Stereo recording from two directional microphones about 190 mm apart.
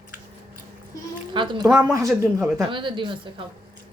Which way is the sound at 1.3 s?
25° right (ahead or behind).